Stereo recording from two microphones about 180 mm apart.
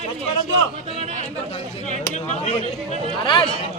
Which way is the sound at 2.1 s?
35° left (ahead or behind).